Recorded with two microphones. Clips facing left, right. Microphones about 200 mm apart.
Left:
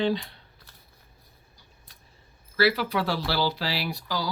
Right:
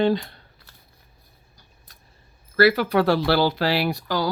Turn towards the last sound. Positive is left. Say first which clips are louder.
# right 7 dB
turn(degrees=-55)  # may be behind; listen again after turning